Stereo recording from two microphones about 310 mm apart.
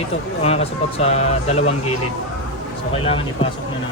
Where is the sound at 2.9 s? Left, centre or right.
Centre.